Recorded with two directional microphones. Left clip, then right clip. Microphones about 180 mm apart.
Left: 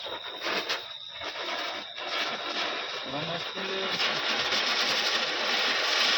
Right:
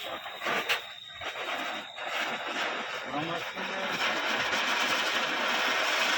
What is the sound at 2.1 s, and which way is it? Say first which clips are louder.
Vehicle: left 1 dB; 15° left (ahead or behind).